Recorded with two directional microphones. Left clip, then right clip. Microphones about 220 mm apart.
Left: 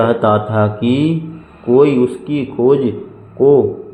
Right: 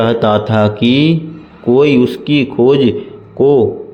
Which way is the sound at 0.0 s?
30° right (ahead or behind).